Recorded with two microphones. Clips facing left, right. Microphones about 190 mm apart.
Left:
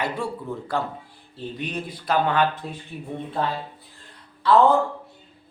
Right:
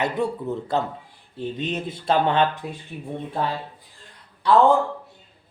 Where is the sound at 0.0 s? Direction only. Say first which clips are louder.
Right 4 dB; 20° right (ahead or behind).